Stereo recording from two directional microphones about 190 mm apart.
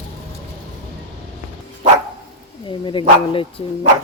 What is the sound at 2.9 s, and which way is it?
Speech, 25° left (ahead or behind).